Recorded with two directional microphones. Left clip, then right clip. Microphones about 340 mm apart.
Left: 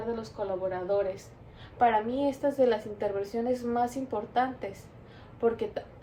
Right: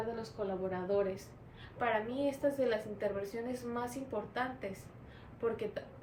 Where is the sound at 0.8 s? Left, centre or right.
Centre.